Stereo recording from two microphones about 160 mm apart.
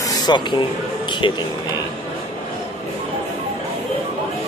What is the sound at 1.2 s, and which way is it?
Speech, 30° left (ahead or behind).